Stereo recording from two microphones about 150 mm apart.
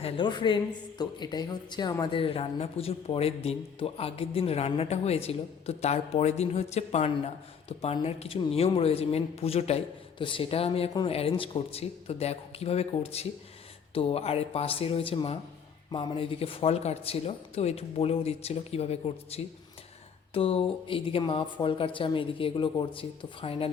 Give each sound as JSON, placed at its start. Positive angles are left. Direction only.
{"t": 0.0, "sound": "speech", "side_deg": 30}